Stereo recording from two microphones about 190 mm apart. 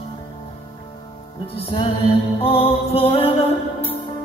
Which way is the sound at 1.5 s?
30° left (ahead or behind).